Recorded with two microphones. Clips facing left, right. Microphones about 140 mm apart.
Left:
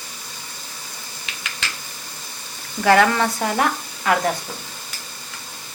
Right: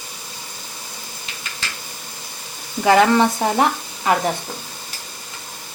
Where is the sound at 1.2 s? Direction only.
85° left.